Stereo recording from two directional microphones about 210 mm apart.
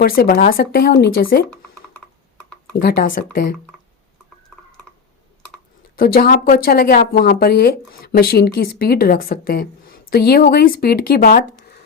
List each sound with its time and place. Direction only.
0.0 s speech: 45° left (ahead or behind)
2.8 s speech: 45° left (ahead or behind)
6.0 s speech: 45° left (ahead or behind)